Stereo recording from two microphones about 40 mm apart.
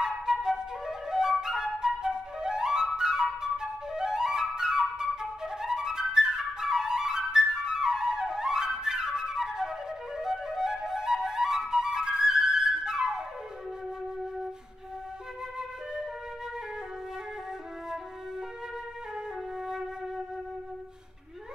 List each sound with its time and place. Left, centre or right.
0.0 s flute: centre